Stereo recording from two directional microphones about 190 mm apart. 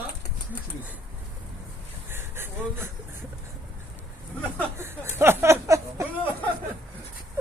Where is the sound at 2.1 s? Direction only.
10° right (ahead or behind).